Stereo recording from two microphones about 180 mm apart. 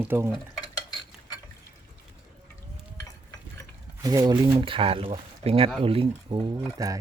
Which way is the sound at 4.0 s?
20° right (ahead or behind).